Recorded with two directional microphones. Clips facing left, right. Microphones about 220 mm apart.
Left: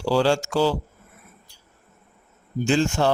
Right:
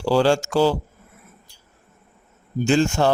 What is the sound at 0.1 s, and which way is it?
Speech, 50° right (ahead or behind).